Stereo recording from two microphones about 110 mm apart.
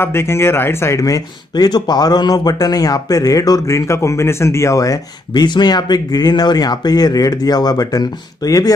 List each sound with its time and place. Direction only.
0.0 s speech: 25° left (ahead or behind)